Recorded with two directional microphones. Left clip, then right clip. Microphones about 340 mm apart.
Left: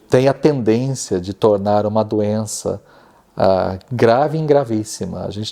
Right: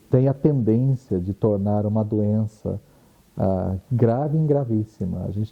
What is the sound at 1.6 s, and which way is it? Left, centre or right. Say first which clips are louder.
Speech: left 9 dB; centre.